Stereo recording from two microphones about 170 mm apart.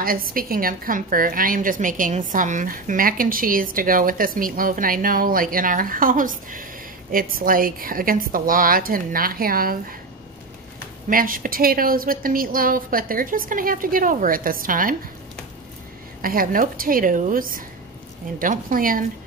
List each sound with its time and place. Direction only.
0.0 s a woman's voice: 55° right (ahead or behind)
11.1 s a woman's voice: 55° right (ahead or behind)
16.2 s a woman's voice: 55° right (ahead or behind)